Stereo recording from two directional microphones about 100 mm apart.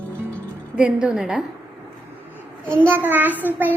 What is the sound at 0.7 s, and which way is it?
Child singing, 10° right (ahead or behind).